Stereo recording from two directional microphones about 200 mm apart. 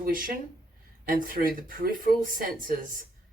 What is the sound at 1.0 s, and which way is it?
Speech, 50° right (ahead or behind).